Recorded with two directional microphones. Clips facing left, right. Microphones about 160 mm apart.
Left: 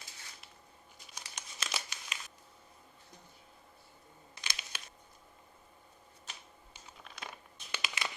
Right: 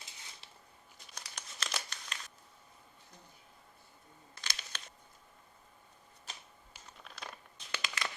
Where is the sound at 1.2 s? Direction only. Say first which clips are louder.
Even; 5° left (ahead or behind).